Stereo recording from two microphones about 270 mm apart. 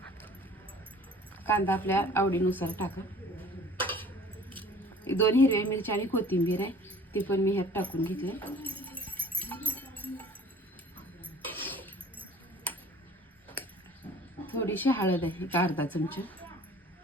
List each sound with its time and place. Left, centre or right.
1.5 s speech: centre
5.1 s speech: centre
8.7 s a sound: centre
9.1 s sheep: centre
9.4 s sheep: centre
11.6 s a sound: centre
14.4 s speech: centre